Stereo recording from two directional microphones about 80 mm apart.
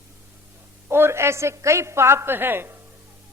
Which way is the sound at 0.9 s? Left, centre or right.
Right.